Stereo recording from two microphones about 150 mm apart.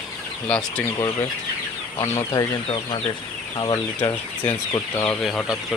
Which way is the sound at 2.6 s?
35° left (ahead or behind).